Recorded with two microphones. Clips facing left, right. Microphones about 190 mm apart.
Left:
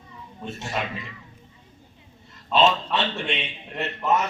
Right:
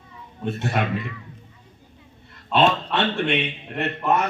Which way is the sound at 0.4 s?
60° right (ahead or behind).